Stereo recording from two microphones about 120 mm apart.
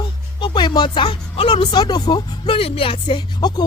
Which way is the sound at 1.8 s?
35° left (ahead or behind).